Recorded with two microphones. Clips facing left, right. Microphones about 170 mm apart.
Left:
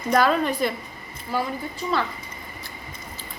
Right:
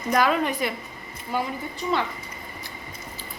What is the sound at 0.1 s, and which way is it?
Speech, 10° right (ahead or behind).